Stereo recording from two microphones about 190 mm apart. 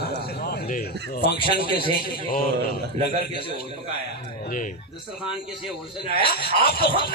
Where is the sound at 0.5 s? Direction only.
45° left (ahead or behind).